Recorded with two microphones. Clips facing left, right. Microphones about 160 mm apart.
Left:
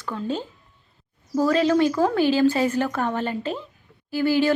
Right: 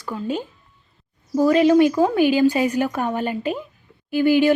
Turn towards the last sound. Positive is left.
turn(degrees=-15)  # may be behind; listen again after turning